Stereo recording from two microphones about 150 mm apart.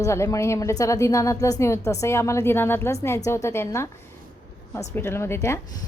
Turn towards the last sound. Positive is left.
turn(degrees=15)  # may be behind; listen again after turning